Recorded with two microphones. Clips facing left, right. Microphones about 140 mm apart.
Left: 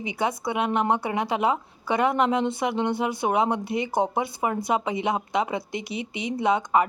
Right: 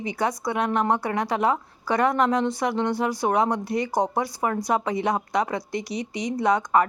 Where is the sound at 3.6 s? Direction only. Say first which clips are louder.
Right 1 dB; 25° left (ahead or behind).